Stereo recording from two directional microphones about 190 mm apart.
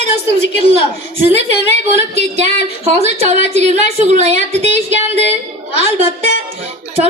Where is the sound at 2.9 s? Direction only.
35° right (ahead or behind).